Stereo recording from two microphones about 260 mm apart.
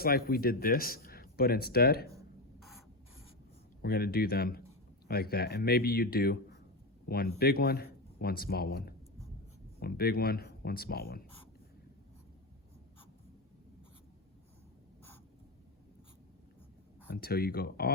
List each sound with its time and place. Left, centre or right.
0.0 s speech: left
2.6 s mechanisms: centre
3.8 s speech: left
7.3 s speech: left
17.2 s speech: left